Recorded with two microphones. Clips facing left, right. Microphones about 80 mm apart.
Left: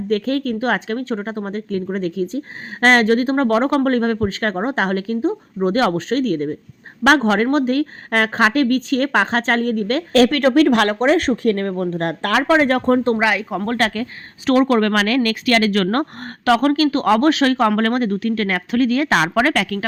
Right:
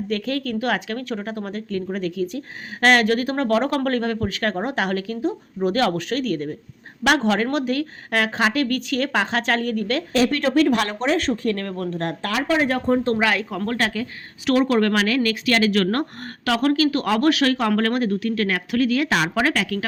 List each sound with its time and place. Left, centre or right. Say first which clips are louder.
0.1 s speech: left 6 dB; left
10.1 s speech: left 7 dB; left
11.9 s speech: left 5 dB; left
13.1 s speech: left 3 dB; centre
13.7 s speech: left 4 dB; left
14.4 s speech: left 3 dB; left